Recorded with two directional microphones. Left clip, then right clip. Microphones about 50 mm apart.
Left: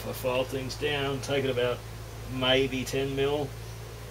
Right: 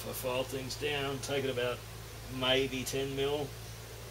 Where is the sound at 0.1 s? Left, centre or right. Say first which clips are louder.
Left 6 dB; centre.